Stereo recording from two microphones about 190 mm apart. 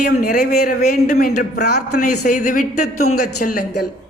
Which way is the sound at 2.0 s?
45° left (ahead or behind).